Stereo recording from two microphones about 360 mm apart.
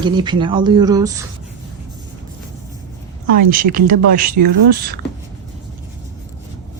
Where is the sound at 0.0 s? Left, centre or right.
Centre.